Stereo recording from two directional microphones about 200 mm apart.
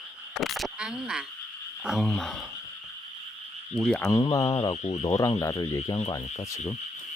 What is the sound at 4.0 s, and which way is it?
Speech, 15° left (ahead or behind).